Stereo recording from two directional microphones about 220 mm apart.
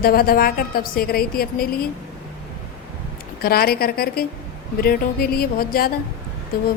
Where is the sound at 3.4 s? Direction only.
45° left (ahead or behind).